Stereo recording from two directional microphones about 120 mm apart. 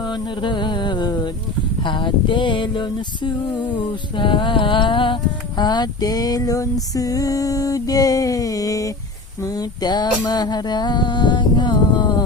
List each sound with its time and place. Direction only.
0.0 s music: 40° left (ahead or behind)
6.9 s a sound: 30° left (ahead or behind)
9.4 s music: 30° left (ahead or behind)